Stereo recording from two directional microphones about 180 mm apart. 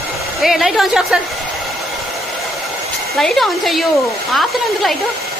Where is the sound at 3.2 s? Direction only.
Centre (ahead or behind).